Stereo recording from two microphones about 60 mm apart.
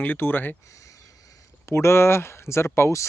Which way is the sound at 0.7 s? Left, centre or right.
Left.